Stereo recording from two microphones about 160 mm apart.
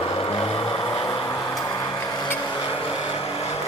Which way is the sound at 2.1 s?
30° left (ahead or behind).